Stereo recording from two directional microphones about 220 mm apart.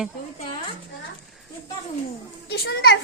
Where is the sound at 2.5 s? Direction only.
45° left (ahead or behind).